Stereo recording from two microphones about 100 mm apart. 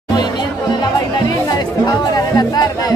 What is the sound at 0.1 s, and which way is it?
Music, 45° left (ahead or behind).